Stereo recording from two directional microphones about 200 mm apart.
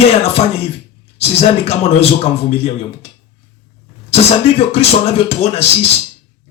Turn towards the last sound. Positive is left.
turn(degrees=30)  # may be behind; listen again after turning